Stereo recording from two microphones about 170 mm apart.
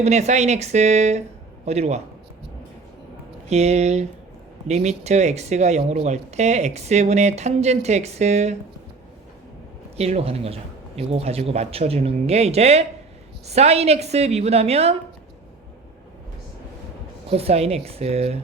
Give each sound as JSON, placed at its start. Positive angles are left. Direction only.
{"t": 0.0, "sound": "speech", "side_deg": -40}
{"t": 3.5, "sound": "speech", "side_deg": -40}
{"t": 10.0, "sound": "speech", "side_deg": -40}
{"t": 17.2, "sound": "speech", "side_deg": -35}